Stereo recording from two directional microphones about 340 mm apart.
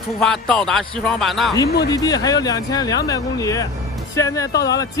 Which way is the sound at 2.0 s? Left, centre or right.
Centre.